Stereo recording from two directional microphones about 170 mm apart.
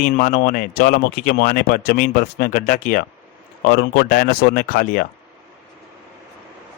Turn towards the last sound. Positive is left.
turn(degrees=55)  # may be behind; listen again after turning